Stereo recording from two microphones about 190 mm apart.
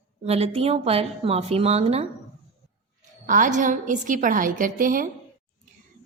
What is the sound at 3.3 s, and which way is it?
A woman's voice, 40° right (ahead or behind).